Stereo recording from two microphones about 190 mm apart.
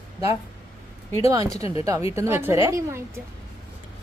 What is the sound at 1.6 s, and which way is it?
Speech, 30° left (ahead or behind).